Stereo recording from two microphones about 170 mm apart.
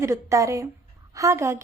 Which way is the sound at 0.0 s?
20° right (ahead or behind).